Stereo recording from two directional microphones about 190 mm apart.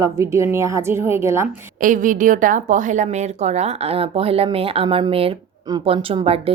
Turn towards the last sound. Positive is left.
turn(degrees=-30)  # may be behind; listen again after turning